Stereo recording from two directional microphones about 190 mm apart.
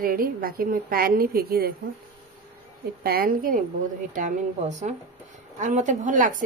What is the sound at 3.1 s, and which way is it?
A woman's voice, 50° right (ahead or behind).